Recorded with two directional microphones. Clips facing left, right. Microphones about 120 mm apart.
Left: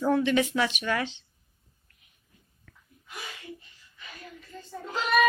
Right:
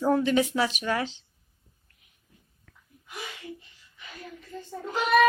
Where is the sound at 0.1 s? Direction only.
40° right (ahead or behind).